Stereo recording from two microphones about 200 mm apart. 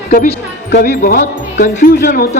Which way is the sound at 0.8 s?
45° left (ahead or behind).